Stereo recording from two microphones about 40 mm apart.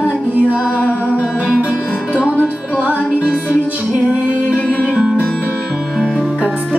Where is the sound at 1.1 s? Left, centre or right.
Right.